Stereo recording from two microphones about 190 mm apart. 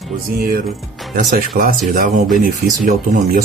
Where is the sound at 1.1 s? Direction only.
45° right (ahead or behind).